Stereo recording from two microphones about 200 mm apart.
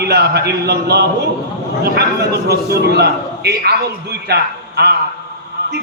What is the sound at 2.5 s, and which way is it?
A man's voice, 50° right (ahead or behind).